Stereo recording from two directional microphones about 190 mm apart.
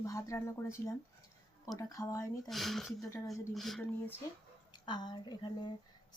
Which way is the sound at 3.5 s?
Centre (ahead or behind).